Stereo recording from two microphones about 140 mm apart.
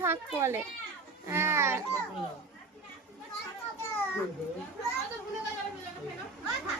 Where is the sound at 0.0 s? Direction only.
20° right (ahead or behind).